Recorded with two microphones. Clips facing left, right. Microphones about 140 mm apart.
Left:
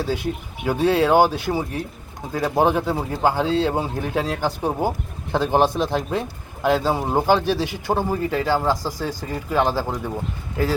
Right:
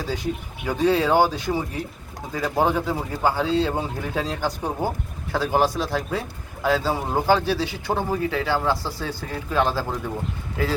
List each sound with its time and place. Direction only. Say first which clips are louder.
0.0 s a man's voice: left 3 dB; 10° left (ahead or behind)